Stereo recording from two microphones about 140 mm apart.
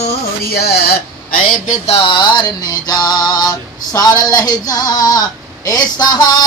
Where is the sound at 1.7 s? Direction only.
45° left (ahead or behind).